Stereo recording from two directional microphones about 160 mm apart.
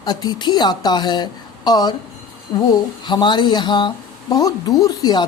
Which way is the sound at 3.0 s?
30° left (ahead or behind).